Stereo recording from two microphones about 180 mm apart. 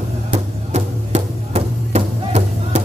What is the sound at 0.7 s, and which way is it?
Music, 35° right (ahead or behind).